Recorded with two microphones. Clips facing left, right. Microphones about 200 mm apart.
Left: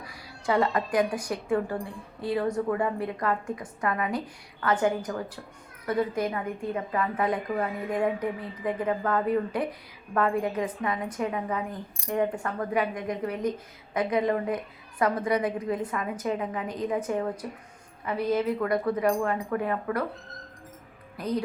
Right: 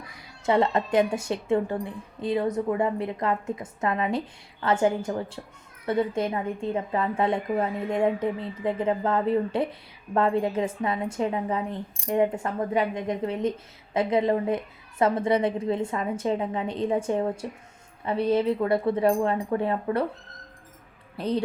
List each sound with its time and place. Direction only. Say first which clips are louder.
0.4 s a woman's voice: right 2 dB; 25° right (ahead or behind)
21.2 s a woman's voice: right 2 dB; 30° right (ahead or behind)